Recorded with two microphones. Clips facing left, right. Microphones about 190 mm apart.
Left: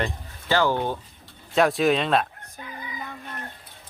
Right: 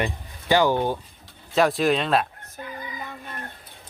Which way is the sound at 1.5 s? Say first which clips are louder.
Even; centre (ahead or behind).